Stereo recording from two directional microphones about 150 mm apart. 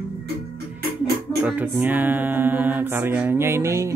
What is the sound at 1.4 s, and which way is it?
Music, 10° right (ahead or behind).